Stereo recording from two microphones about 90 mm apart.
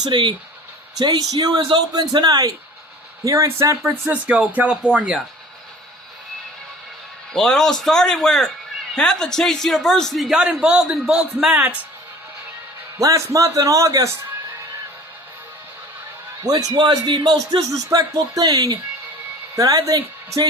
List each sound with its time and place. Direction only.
0.1 s speech: 60° right (ahead or behind)
0.9 s speech: 50° right (ahead or behind)
3.2 s a man's voice: 30° right (ahead or behind); by 5.2 s 10° right (ahead or behind)
7.3 s a man's voice: 5° left (ahead or behind)
11.5 s speech: 20° right (ahead or behind)
13.0 s a man's voice: 35° right (ahead or behind)
16.5 s a man's voice: 45° right (ahead or behind)